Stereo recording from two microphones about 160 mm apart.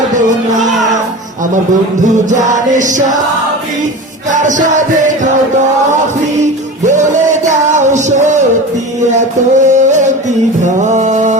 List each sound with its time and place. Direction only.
0.2 s music: 50° right (ahead or behind)
2.0 s music: 50° right (ahead or behind)
4.3 s music: 50° right (ahead or behind)
6.8 s music: 50° right (ahead or behind)